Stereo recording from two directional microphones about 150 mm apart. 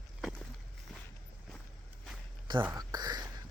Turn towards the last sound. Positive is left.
turn(degrees=-25)  # may be behind; listen again after turning